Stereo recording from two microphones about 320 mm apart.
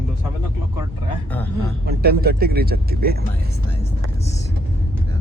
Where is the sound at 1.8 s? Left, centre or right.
Right.